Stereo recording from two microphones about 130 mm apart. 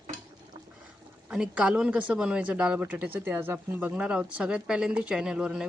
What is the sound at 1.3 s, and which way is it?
Speech, 5° right (ahead or behind).